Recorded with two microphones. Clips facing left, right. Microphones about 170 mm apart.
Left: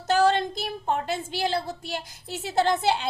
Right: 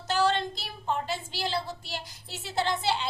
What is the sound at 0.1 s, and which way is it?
A woman's voice, 50° left (ahead or behind).